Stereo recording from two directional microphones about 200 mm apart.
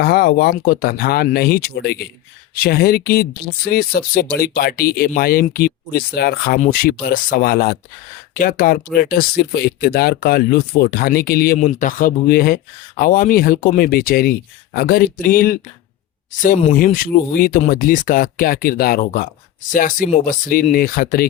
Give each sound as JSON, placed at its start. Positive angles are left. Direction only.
{"t": 0.0, "sound": "speech", "side_deg": 50}